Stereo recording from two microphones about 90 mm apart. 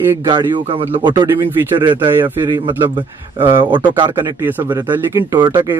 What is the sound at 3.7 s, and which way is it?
Speech, 65° right (ahead or behind).